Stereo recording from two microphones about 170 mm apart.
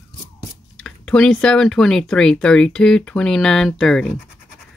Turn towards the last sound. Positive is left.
turn(degrees=0)  # may be behind; listen again after turning